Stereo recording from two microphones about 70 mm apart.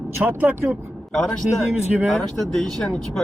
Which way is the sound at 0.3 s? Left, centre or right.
Right.